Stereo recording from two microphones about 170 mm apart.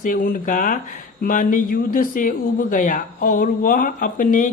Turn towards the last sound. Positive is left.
turn(degrees=50)  # may be behind; listen again after turning